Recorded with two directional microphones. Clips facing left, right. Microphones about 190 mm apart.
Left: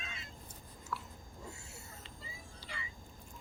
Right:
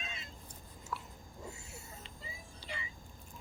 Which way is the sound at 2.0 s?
20° right (ahead or behind).